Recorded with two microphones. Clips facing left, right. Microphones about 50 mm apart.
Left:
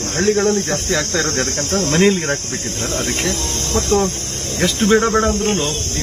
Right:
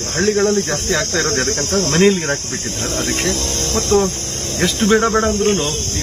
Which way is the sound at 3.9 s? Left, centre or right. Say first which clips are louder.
Right 2 dB; right.